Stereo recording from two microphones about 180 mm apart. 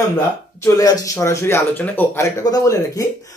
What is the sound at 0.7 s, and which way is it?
Speech, 20° left (ahead or behind).